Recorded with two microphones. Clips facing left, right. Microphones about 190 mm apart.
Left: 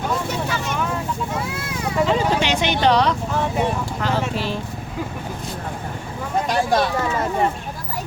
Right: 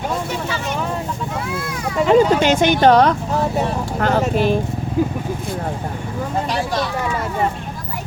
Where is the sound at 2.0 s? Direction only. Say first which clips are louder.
Right 10 dB; 50° right (ahead or behind).